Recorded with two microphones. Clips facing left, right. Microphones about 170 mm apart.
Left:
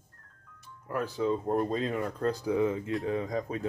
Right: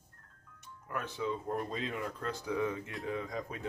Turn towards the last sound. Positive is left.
turn(degrees=35)  # may be behind; listen again after turning